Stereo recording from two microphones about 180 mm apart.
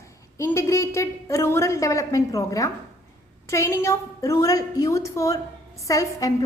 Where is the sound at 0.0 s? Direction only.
15° left (ahead or behind).